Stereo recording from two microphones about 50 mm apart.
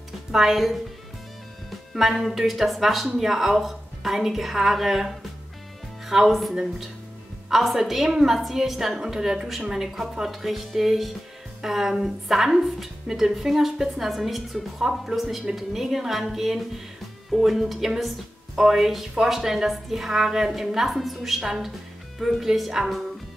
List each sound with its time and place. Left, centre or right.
0.3 s a woman's voice: centre
2.0 s a woman's voice: centre